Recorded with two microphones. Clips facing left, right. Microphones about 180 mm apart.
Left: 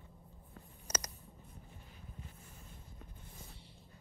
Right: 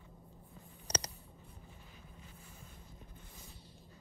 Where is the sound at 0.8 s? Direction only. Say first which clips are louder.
Right 3 dB; 30° right (ahead or behind).